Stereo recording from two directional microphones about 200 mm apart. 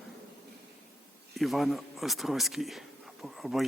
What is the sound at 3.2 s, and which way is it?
Insect, centre (ahead or behind).